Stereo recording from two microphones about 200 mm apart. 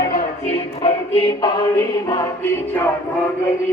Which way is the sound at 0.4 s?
30° left (ahead or behind).